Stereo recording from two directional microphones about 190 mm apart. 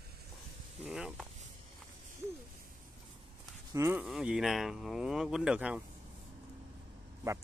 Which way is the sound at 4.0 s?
5° right (ahead or behind).